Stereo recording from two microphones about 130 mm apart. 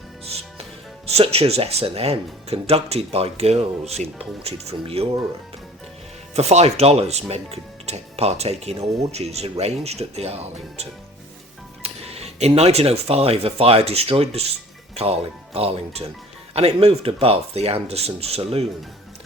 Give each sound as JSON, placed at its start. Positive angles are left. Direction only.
{"t": 1.1, "sound": "speech", "side_deg": -50}
{"t": 6.3, "sound": "speech", "side_deg": -55}
{"t": 11.8, "sound": "speech", "side_deg": -50}
{"t": 15.5, "sound": "speech", "side_deg": -50}